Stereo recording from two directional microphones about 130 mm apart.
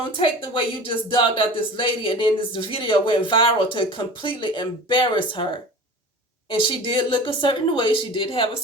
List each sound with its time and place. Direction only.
0.0 s speech: 40° left (ahead or behind)